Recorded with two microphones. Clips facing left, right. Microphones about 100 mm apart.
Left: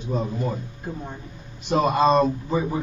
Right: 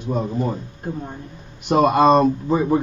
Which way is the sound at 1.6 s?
60° right (ahead or behind).